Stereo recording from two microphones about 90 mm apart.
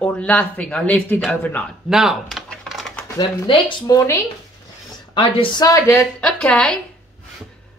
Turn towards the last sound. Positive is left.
turn(degrees=10)  # may be behind; listen again after turning